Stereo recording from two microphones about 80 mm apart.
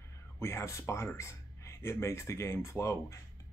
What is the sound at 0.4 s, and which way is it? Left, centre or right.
Speech, left.